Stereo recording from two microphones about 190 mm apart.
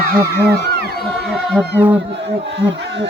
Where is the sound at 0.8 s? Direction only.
55° right (ahead or behind).